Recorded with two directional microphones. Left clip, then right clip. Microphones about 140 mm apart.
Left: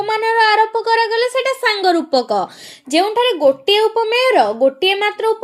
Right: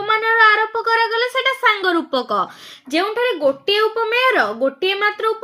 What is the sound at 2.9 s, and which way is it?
Speech, 30° left (ahead or behind).